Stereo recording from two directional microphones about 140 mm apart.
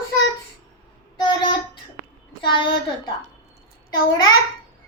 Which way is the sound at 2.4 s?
35° left (ahead or behind).